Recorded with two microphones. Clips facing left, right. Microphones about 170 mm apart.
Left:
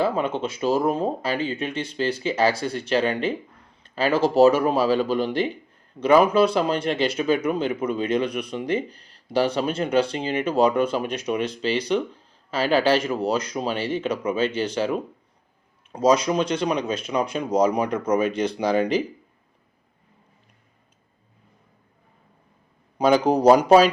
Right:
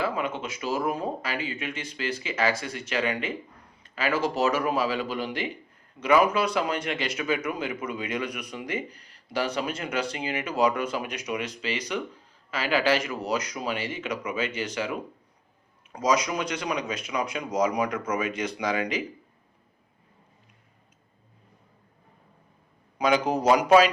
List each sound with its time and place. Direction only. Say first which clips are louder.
0.0 s speech: left 6 dB; 30° left (ahead or behind)
23.0 s speech: left 5 dB; 35° left (ahead or behind)